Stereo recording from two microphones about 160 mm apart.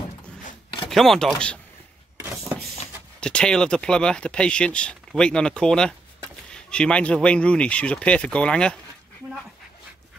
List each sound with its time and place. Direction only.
0.8 s speech: centre (ahead or behind)
2.2 s a sound: 15° right (ahead or behind)
3.2 s speech: 5° left (ahead or behind)